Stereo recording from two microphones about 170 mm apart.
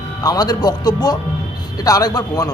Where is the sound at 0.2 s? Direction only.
20° left (ahead or behind).